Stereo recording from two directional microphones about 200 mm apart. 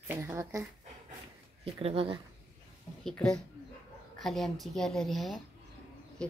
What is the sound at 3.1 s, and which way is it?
A woman's voice, 5° left (ahead or behind).